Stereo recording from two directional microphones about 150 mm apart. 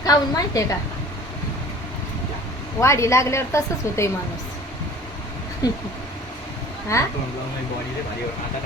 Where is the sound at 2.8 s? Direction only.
20° left (ahead or behind).